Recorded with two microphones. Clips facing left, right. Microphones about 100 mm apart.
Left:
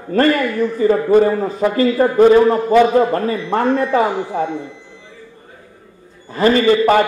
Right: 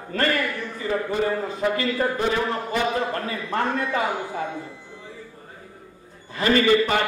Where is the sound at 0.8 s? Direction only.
40° left (ahead or behind).